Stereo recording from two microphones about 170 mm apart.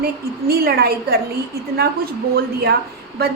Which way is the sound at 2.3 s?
70° right (ahead or behind).